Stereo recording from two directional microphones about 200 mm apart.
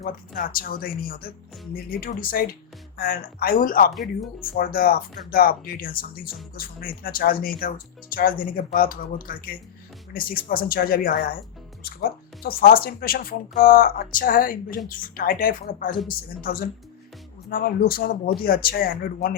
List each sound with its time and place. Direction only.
0.0 s speech: 45° left (ahead or behind)